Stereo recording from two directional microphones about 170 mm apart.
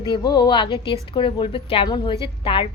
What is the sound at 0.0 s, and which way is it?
A woman's voice, 25° left (ahead or behind).